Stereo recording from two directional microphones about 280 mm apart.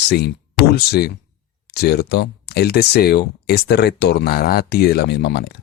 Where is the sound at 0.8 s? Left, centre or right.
Left.